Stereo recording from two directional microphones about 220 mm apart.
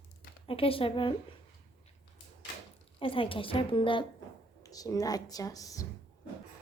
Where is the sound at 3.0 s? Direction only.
25° left (ahead or behind).